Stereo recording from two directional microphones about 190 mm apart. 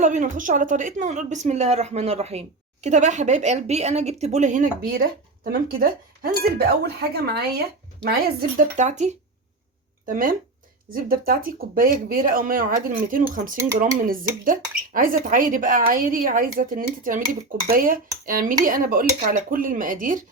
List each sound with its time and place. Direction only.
0.0 s a woman's voice: 40° right (ahead or behind); by 8.4 s 60° right (ahead or behind)
8.5 s speech: 40° right (ahead or behind)
13.6 s speech: 15° right (ahead or behind)
14.0 s speech: 45° right (ahead or behind)